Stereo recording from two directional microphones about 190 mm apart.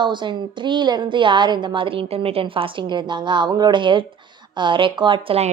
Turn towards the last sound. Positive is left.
turn(degrees=-30)  # may be behind; listen again after turning